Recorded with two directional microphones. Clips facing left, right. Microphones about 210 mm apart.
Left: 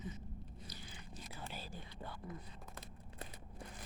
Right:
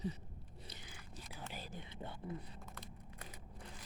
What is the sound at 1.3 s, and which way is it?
Whispering, 15° right (ahead or behind).